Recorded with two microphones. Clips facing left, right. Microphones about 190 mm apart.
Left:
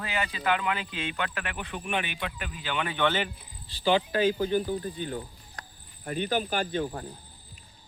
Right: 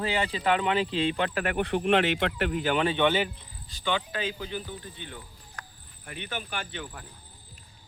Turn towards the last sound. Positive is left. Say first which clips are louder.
# left 8 dB
turn(degrees=35)  # may be behind; listen again after turning